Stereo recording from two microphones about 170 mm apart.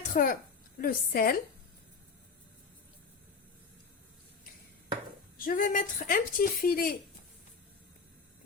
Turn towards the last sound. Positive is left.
turn(degrees=60)  # may be behind; listen again after turning